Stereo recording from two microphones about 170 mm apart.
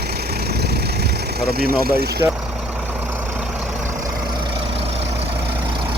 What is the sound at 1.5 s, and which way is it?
Speech, 65° right (ahead or behind).